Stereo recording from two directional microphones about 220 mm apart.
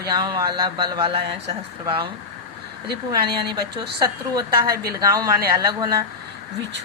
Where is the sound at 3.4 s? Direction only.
20° right (ahead or behind).